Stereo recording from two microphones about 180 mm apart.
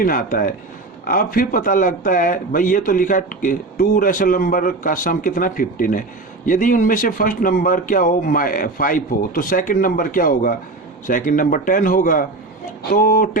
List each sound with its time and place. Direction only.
0.0 s speech: 50° left (ahead or behind)